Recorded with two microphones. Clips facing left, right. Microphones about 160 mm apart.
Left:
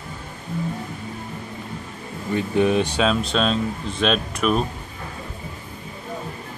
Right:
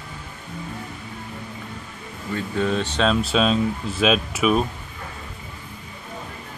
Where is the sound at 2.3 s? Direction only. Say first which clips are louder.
Left 4 dB; 15° left (ahead or behind).